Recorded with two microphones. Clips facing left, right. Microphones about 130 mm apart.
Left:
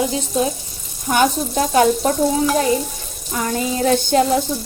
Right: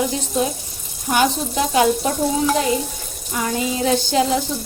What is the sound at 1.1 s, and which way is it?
Frying, 45° left (ahead or behind).